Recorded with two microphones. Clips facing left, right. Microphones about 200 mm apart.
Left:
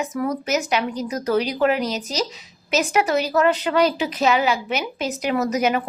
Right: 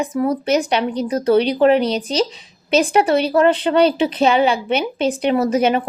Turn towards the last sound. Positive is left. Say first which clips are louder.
# right 4 dB
turn(degrees=-30)  # may be behind; listen again after turning